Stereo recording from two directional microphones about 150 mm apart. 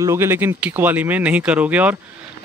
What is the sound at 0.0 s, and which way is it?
Speech, 15° right (ahead or behind).